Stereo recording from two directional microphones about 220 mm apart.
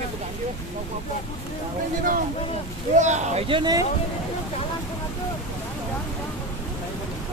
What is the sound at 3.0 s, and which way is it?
Speech, 30° right (ahead or behind).